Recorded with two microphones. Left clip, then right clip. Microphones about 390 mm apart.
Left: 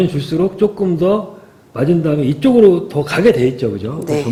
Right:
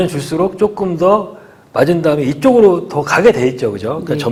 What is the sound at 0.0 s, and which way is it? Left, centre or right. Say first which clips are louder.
A man's voice: right 1 dB; right.